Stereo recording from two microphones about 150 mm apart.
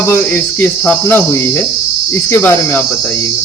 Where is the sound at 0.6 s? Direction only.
15° left (ahead or behind).